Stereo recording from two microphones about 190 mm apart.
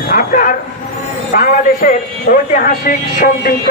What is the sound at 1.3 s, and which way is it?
A man's voice, 45° left (ahead or behind).